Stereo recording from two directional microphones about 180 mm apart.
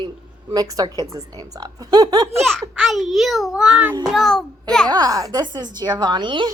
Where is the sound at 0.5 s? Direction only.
20° right (ahead or behind).